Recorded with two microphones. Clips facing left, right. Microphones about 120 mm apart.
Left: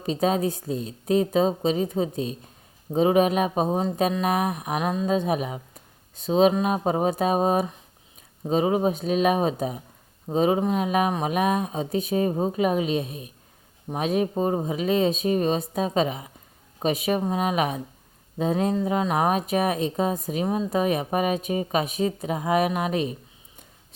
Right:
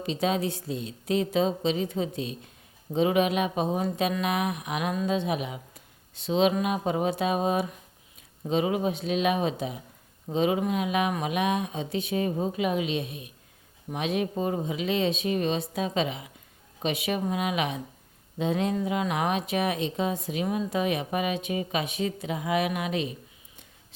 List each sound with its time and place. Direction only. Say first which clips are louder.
0.0 s speech: left 4 dB; 40° left (ahead or behind)